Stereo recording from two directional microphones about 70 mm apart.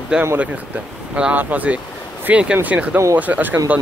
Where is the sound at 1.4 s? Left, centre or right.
Right.